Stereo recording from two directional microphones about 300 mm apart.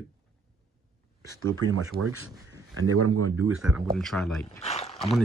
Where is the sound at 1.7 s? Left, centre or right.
Right.